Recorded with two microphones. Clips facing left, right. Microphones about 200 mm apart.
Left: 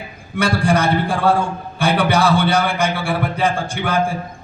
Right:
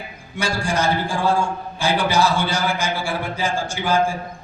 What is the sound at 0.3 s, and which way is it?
A man's voice, 60° left (ahead or behind).